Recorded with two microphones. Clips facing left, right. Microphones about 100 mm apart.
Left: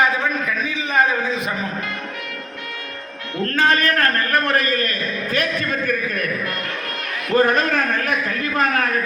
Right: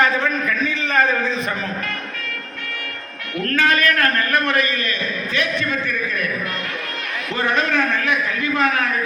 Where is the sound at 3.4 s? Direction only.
30° left (ahead or behind); by 6.3 s 50° left (ahead or behind).